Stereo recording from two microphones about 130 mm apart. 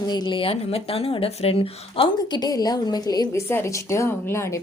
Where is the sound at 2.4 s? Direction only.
30° left (ahead or behind).